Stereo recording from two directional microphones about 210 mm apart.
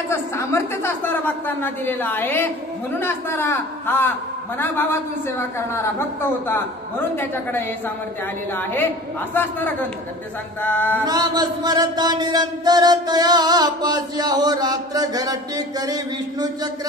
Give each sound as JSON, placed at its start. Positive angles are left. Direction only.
{"t": 0.1, "sound": "a woman's voice", "side_deg": 10}
{"t": 8.5, "sound": "a woman's voice", "side_deg": 10}
{"t": 11.1, "sound": "music", "side_deg": -20}